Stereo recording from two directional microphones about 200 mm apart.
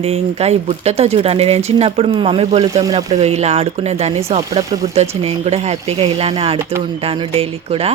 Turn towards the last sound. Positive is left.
turn(degrees=-30)  # may be behind; listen again after turning